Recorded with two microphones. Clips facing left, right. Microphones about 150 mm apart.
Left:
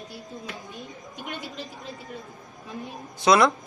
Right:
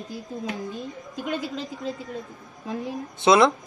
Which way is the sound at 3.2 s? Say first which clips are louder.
Right 2 dB; 25° right (ahead or behind).